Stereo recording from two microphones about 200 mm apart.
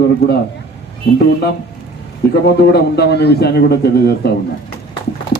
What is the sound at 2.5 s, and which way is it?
A man's voice, 50° left (ahead or behind).